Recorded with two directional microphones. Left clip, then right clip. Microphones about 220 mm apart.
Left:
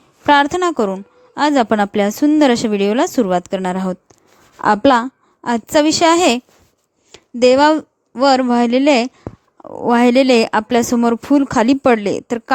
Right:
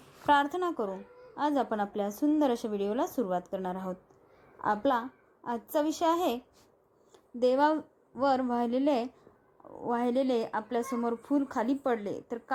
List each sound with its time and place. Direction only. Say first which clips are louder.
0.3 s a woman's voice: left 14 dB; 40° left (ahead or behind)